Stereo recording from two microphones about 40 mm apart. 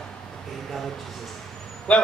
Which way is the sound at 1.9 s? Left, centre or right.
Left.